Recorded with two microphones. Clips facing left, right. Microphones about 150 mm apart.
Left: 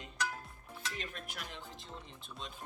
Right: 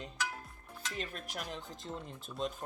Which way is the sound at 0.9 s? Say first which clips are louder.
Right 4 dB; 40° right (ahead or behind).